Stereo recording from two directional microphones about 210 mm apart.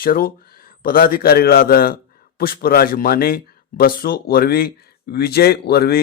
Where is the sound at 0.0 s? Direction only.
45° left (ahead or behind).